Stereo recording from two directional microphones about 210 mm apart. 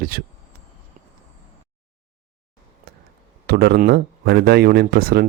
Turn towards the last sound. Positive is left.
turn(degrees=-45)  # may be behind; listen again after turning